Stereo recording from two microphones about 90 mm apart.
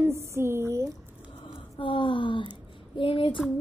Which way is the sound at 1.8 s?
70° left (ahead or behind).